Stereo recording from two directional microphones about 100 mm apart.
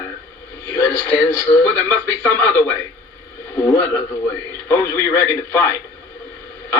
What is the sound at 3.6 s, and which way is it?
Speech, 30° left (ahead or behind).